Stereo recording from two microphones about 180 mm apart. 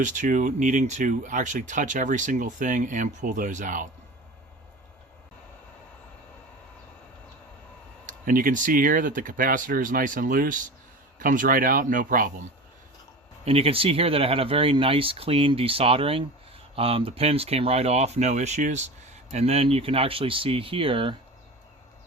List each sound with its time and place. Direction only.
0.0 s speech: 45° right (ahead or behind)
8.0 s speech: 50° right (ahead or behind)
13.4 s speech: 30° right (ahead or behind)